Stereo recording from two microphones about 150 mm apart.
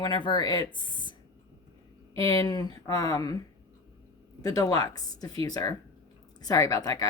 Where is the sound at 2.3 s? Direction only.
25° left (ahead or behind).